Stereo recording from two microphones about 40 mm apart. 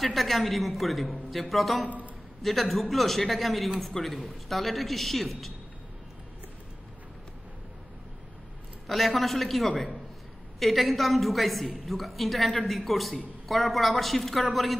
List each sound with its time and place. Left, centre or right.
0.0 s a woman's voice: centre
8.8 s a woman's voice: centre